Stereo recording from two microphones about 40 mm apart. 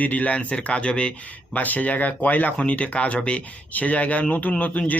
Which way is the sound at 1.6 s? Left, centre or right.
Left.